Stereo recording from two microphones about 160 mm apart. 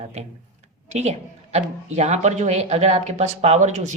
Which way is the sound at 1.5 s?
45° right (ahead or behind).